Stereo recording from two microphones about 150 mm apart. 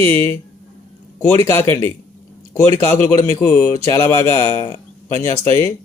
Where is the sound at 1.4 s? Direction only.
15° left (ahead or behind).